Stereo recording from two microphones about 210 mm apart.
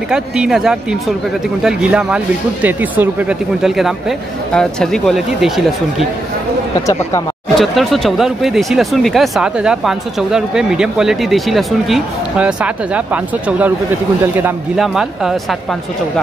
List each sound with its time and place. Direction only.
0.1 s speech: 5° right (ahead or behind)
6.9 s speech: 15° left (ahead or behind)
7.6 s speech: centre (ahead or behind)